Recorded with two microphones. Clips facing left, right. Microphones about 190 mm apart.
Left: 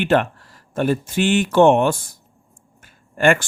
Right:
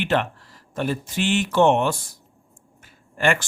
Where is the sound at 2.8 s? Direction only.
50° left (ahead or behind).